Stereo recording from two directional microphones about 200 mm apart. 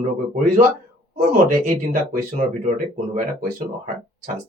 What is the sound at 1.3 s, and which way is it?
Speech, 40° right (ahead or behind).